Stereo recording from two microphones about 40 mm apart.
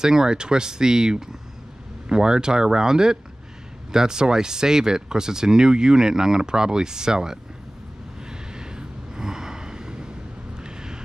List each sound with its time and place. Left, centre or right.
0.0 s speech: centre
8.3 s vehicle: centre